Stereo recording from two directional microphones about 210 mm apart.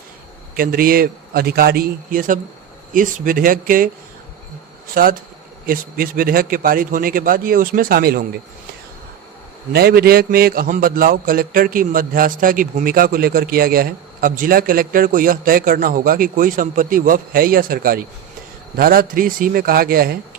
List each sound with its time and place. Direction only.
0.5 s a man's voice: 45° right (ahead or behind)
5.0 s a man's voice: 40° right (ahead or behind)
9.7 s a man's voice: 45° right (ahead or behind)